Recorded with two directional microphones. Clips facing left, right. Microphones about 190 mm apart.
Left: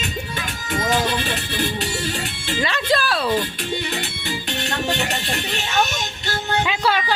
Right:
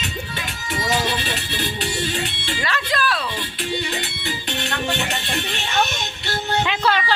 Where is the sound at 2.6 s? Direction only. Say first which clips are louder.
Left 3 dB; 25° left (ahead or behind).